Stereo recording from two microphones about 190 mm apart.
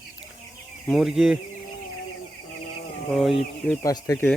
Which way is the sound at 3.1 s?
Centre (ahead or behind).